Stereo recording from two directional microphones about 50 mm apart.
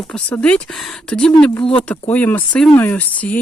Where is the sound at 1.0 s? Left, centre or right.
Centre.